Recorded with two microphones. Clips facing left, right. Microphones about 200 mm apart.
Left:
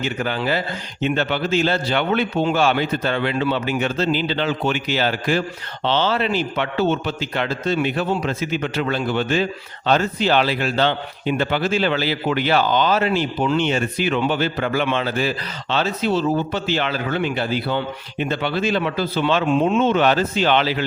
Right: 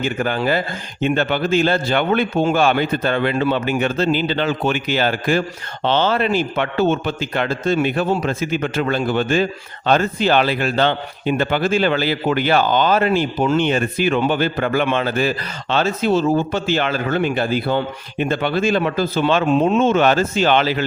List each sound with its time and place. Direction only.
0.0 s a man's voice: 50° right (ahead or behind)